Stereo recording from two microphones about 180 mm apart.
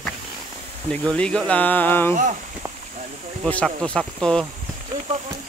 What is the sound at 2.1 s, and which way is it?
Speech, 45° right (ahead or behind).